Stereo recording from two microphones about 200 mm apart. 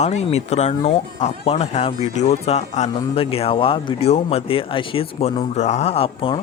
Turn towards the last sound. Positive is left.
turn(degrees=25)  # may be behind; listen again after turning